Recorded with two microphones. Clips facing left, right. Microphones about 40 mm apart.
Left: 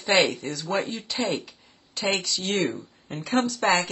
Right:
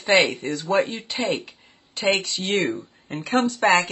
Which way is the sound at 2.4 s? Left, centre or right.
Right.